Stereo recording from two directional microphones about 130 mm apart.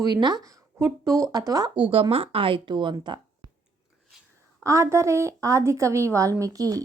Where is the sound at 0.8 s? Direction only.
20° right (ahead or behind).